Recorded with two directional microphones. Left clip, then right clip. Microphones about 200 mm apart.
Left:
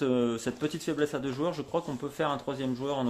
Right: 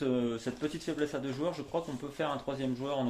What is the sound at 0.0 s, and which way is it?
Speech, 45° left (ahead or behind).